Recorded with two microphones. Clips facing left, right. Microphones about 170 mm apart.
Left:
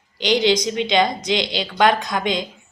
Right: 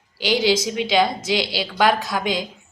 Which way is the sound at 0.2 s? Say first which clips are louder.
Left 2 dB; 5° right (ahead or behind).